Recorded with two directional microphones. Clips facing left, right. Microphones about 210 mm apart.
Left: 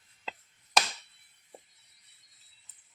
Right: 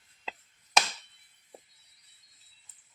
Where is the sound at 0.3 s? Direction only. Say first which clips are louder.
Even; centre (ahead or behind).